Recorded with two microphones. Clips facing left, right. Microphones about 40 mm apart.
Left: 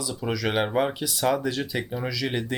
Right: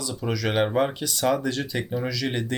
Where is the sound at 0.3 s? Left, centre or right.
Centre.